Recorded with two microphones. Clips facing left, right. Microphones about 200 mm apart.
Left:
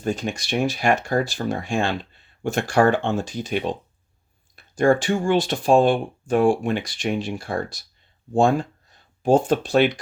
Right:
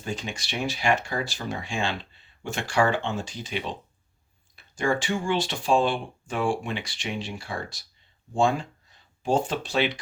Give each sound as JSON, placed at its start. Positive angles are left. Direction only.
{"t": 0.0, "sound": "speech", "side_deg": 50}